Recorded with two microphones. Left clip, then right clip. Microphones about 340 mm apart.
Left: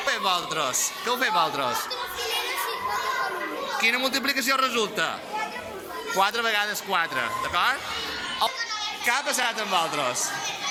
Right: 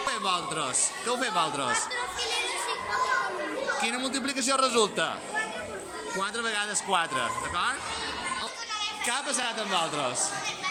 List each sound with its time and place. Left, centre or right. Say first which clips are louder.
0.0 s speech: left 4 dB; centre
3.8 s speech: left 6 dB; centre
6.1 s speech: left 7 dB; centre
9.0 s speech: left 8 dB; centre